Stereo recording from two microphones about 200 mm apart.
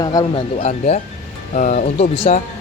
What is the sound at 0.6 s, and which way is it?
Speech, 35° left (ahead or behind).